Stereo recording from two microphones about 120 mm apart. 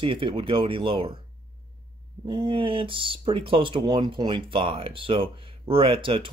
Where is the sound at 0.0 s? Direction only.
45° right (ahead or behind).